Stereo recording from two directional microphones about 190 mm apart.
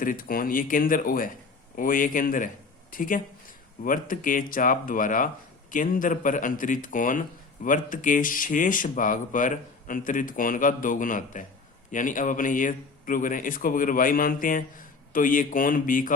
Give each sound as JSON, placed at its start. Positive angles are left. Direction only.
{"t": 0.0, "sound": "speech", "side_deg": 45}